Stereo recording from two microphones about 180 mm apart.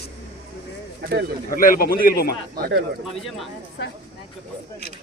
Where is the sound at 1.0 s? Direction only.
55° right (ahead or behind).